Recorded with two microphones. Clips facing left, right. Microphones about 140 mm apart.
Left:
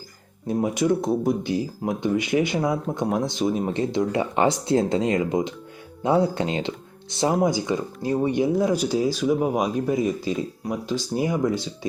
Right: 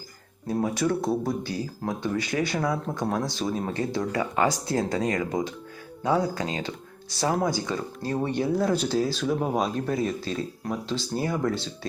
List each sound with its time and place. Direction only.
0.4 s speech: 20° left (ahead or behind)